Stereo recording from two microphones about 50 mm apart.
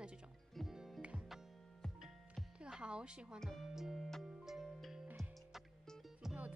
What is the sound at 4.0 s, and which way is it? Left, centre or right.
Music, centre.